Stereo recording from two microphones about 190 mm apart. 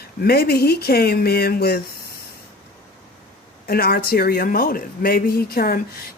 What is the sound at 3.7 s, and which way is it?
Speech, 55° left (ahead or behind).